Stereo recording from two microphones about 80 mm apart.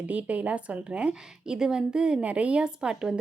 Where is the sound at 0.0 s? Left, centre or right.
Centre.